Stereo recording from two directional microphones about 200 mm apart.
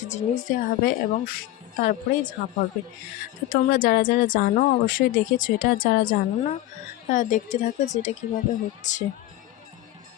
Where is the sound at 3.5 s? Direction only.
45° left (ahead or behind).